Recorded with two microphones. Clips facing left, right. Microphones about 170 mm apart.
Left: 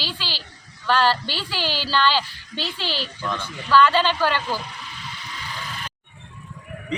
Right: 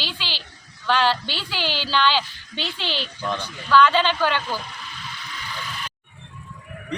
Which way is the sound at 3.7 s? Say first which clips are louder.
Even; 5° left (ahead or behind).